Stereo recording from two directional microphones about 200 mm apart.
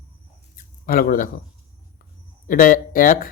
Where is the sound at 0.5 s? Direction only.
45° left (ahead or behind).